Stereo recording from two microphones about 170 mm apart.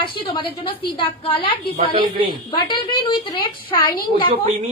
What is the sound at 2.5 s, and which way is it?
A woman's voice, 25° left (ahead or behind).